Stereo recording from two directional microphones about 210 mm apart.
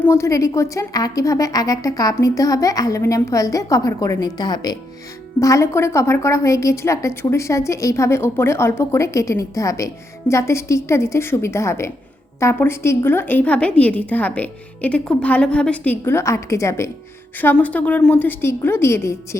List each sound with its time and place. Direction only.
0.0 s a woman's voice: 15° left (ahead or behind)